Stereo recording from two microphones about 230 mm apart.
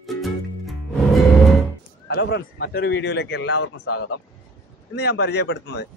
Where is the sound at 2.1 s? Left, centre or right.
Left.